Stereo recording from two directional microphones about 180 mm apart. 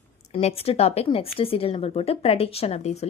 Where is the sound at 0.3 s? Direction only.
35° left (ahead or behind).